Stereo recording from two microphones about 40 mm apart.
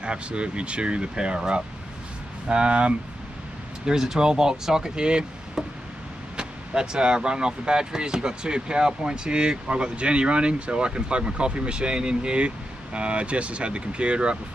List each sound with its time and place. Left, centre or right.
0.0 s speech: right
3.8 s speech: centre
6.3 s speech: right